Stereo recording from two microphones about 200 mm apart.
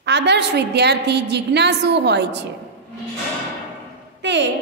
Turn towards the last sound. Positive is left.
turn(degrees=-60)  # may be behind; listen again after turning